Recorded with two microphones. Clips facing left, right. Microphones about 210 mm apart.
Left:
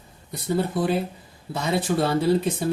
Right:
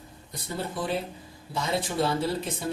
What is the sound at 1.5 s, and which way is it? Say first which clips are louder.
Speech: left 5 dB; 60° left (ahead or behind).